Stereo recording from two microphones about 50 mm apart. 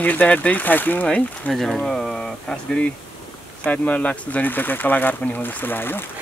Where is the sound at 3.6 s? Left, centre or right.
Left.